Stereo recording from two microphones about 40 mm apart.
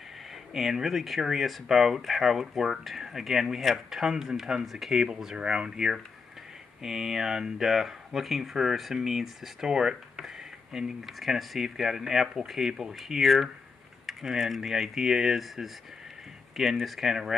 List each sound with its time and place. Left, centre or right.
0.5 s speech: centre
5.2 s speech: centre
13.2 s speech: centre